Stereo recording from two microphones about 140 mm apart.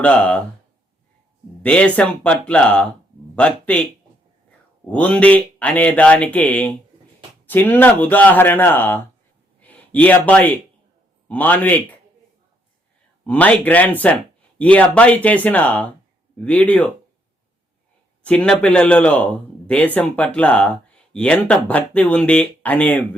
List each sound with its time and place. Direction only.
0.0 s speech: 10° left (ahead or behind)
1.6 s speech: 10° left (ahead or behind)
4.9 s speech: 10° left (ahead or behind)
9.6 s a sound: 10° left (ahead or behind)
11.3 s speech: 10° left (ahead or behind)
13.2 s speech: 10° left (ahead or behind)
18.2 s speech: 5° left (ahead or behind)